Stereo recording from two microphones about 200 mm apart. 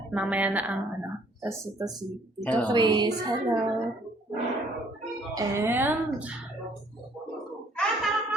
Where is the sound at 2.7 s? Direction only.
20° right (ahead or behind).